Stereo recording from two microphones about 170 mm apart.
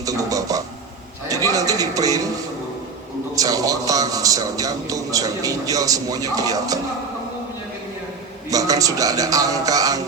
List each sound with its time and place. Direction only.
0.0 s a sound: 20° right (ahead or behind)
3.3 s a man's voice: 20° right (ahead or behind)
8.4 s a man's voice: 20° right (ahead or behind)